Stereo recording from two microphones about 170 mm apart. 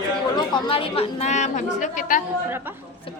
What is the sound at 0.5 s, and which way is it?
A woman's voice, 30° left (ahead or behind).